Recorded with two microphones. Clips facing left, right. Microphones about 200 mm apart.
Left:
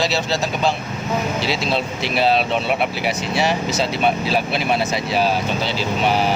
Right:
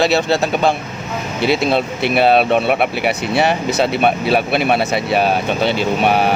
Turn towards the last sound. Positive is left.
turn(degrees=-60)  # may be behind; listen again after turning